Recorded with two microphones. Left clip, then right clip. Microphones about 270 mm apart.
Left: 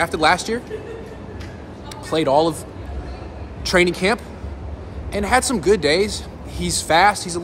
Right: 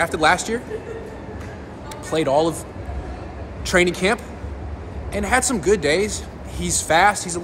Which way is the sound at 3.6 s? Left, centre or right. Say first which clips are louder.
Left 1 dB; centre.